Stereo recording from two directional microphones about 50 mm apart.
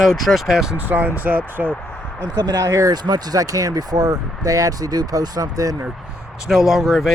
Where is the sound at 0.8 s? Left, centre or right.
Right.